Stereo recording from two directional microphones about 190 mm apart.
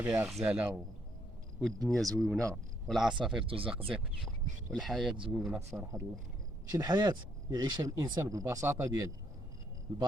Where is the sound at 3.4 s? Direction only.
30° right (ahead or behind).